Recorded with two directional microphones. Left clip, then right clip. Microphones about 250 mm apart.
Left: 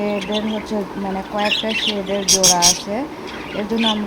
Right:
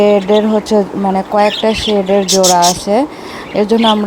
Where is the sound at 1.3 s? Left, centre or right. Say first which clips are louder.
Right 7 dB; right.